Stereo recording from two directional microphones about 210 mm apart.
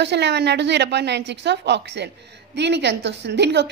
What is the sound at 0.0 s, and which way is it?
A woman's voice, 55° right (ahead or behind).